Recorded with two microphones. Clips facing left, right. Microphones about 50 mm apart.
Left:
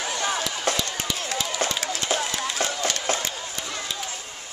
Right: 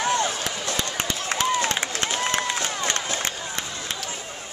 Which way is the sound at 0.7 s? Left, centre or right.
Right.